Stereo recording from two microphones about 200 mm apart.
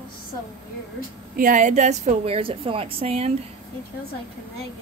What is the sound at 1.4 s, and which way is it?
A woman's voice, 40° right (ahead or behind).